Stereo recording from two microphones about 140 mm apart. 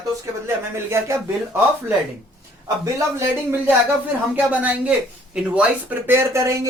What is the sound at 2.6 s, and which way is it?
Speech, 20° right (ahead or behind).